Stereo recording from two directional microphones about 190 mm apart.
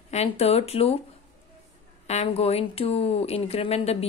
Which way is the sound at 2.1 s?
35° left (ahead or behind).